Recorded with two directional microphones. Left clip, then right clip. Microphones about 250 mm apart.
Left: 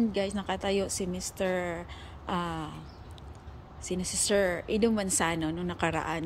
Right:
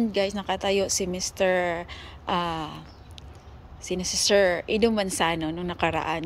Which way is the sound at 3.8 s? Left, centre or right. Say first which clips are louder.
Right 7 dB; centre.